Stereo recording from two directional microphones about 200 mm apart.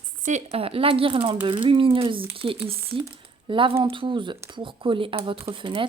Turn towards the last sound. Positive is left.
turn(degrees=-25)  # may be behind; listen again after turning